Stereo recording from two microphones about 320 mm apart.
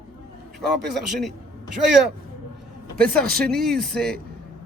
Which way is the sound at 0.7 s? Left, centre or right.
Centre.